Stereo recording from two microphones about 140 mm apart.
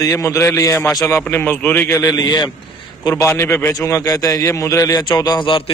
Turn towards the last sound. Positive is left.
turn(degrees=40)  # may be behind; listen again after turning